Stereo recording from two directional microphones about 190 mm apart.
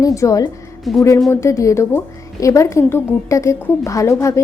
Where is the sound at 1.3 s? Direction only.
15° left (ahead or behind).